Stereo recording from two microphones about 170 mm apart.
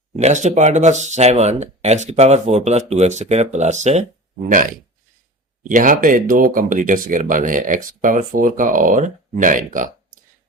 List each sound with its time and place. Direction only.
0.2 s speech: 45° right (ahead or behind)
5.6 s speech: 50° right (ahead or behind)